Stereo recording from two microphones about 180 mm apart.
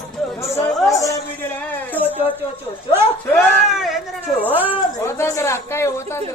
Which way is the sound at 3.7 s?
Centre (ahead or behind).